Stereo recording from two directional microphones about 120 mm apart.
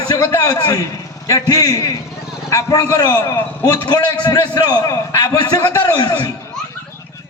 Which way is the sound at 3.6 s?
30° left (ahead or behind).